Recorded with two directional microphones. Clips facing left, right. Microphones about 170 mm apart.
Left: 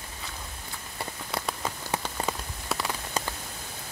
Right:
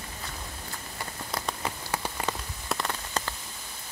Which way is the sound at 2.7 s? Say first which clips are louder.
Even; 5° left (ahead or behind).